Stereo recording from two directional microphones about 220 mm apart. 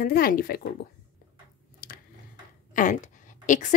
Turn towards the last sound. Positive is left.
turn(degrees=35)  # may be behind; listen again after turning